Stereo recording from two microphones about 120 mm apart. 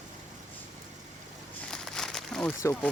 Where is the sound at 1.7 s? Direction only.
5° left (ahead or behind).